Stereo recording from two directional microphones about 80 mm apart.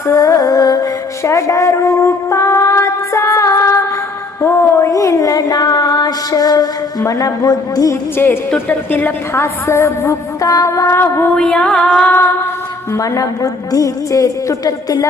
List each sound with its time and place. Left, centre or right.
0.1 s music: left
1.3 s a sound: left
7.1 s a woman's voice: left
8.1 s a woman's voice: left
11.3 s music: centre
12.0 s a woman's voice: left
12.9 s a woman's voice: left